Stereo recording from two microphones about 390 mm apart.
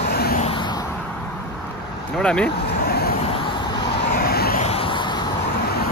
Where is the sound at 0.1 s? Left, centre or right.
Left.